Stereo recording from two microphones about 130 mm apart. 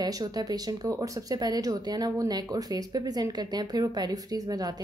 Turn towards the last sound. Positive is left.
turn(degrees=-30)  # may be behind; listen again after turning